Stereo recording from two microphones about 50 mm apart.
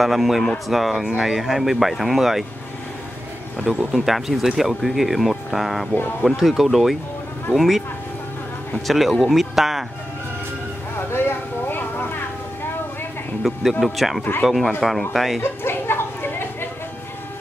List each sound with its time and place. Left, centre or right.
0.0 s speech: centre
3.9 s speech: centre
8.8 s speech: centre
11.0 s a sound: left
13.4 s speech: centre
15.6 s a sound: left